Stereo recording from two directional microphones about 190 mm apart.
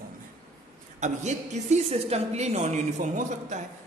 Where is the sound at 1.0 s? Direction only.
40° right (ahead or behind).